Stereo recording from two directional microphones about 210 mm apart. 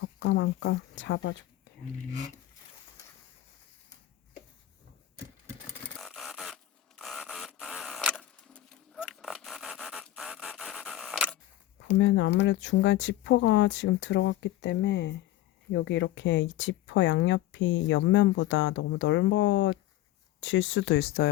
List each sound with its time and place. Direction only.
0.0 s speech: 60° left (ahead or behind)
6.0 s a sound: centre (ahead or behind)
11.9 s speech: 60° left (ahead or behind)